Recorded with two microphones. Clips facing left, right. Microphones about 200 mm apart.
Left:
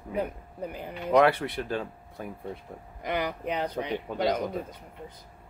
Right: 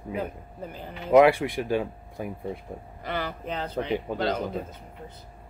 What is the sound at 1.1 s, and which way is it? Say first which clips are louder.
Speech: right 4 dB; 10° right (ahead or behind).